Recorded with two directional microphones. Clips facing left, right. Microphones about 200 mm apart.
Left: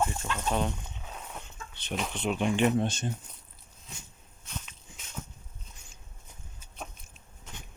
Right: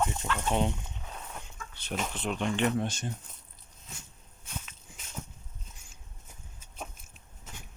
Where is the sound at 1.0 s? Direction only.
5° left (ahead or behind).